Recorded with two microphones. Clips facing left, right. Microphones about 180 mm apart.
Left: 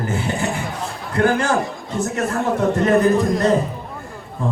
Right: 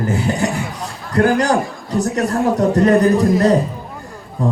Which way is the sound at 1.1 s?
40° right (ahead or behind).